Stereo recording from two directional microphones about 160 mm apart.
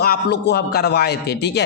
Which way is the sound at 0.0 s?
85° left.